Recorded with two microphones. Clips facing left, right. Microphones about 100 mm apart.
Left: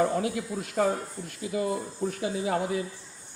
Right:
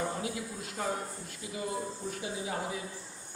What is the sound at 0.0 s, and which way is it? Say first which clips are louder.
Speech: left 8 dB; 65° left (ahead or behind).